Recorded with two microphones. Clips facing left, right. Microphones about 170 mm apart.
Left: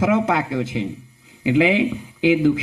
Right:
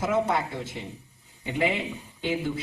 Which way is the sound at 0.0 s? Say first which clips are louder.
Left 6 dB; 90° left.